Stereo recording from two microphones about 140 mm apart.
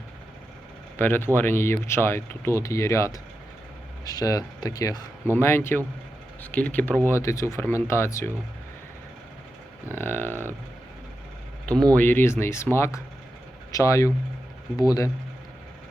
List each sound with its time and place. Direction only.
0.9 s speech: 15° left (ahead or behind)
9.9 s speech: 15° left (ahead or behind)
11.6 s speech: 5° left (ahead or behind); by 15.1 s 25° left (ahead or behind)